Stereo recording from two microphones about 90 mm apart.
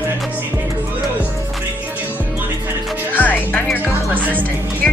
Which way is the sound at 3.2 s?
15° left (ahead or behind).